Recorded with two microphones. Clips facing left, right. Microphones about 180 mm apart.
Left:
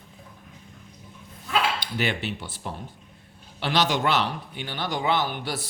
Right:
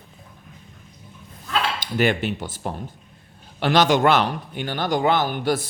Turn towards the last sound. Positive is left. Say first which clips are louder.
# right 6 dB
turn(degrees=-50)  # may be behind; listen again after turning